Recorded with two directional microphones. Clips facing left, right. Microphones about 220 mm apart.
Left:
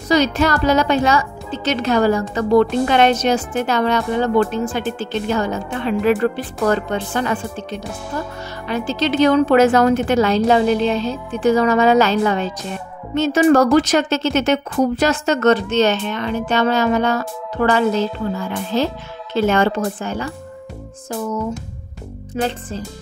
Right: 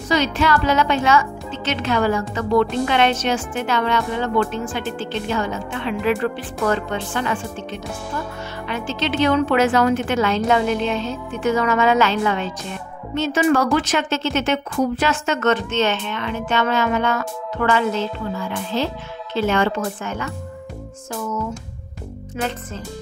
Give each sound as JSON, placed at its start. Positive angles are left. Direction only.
{"t": 0.1, "sound": "a woman's voice", "side_deg": 40}
{"t": 22.3, "sound": "a woman's voice", "side_deg": 35}